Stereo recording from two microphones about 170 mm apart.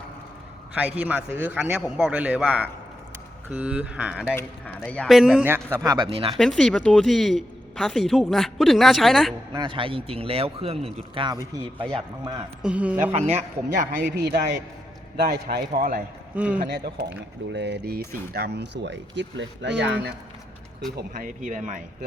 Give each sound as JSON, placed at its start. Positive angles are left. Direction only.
{"t": 0.7, "sound": "a man's voice", "side_deg": -10}
{"t": 6.3, "sound": "speech", "side_deg": 0}
{"t": 9.6, "sound": "speech", "side_deg": -30}
{"t": 11.8, "sound": "speech", "side_deg": 5}
{"t": 12.2, "sound": "speech", "side_deg": -25}
{"t": 12.6, "sound": "a man's voice", "side_deg": -5}
{"t": 13.1, "sound": "speech", "side_deg": -40}
{"t": 14.0, "sound": "a man's voice", "side_deg": -80}
{"t": 15.1, "sound": "a man's voice", "side_deg": -65}
{"t": 16.3, "sound": "a man's voice", "side_deg": -10}
{"t": 16.6, "sound": "a man's voice", "side_deg": -70}
{"t": 17.5, "sound": "speech", "side_deg": -85}
{"t": 21.2, "sound": "speech", "side_deg": -50}